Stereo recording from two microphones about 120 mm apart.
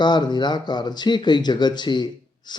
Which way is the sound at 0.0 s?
40° left (ahead or behind).